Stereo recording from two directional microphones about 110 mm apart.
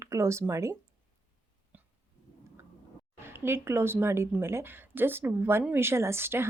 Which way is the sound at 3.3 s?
20° right (ahead or behind).